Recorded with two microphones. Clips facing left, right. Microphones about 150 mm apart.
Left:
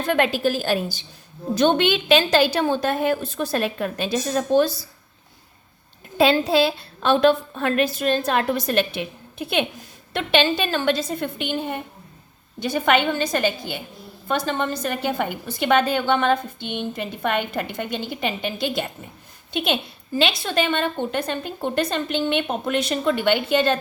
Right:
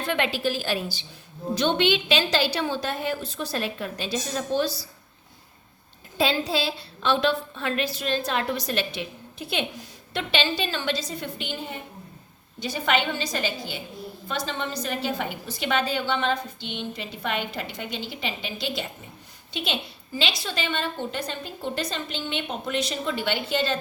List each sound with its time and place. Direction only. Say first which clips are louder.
0.0 s a woman's voice: left 5 dB; 45° left (ahead or behind)
6.1 s a woman's voice: left 7 dB; 55° left (ahead or behind)